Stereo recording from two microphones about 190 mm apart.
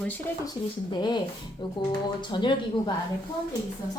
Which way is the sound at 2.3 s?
25° left (ahead or behind).